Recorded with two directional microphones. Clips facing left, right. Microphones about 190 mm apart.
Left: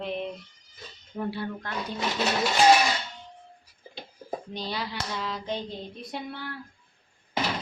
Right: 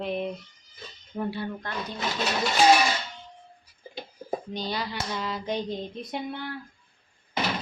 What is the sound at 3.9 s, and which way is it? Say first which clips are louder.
Speech: right 3 dB; centre (ahead or behind).